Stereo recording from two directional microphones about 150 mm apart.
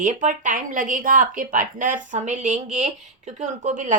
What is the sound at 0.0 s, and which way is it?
Speech, 60° right (ahead or behind).